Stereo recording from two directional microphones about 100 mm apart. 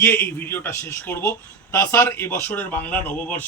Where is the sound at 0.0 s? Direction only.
20° left (ahead or behind).